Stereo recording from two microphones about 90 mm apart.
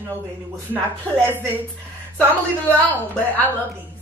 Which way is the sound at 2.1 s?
20° left (ahead or behind).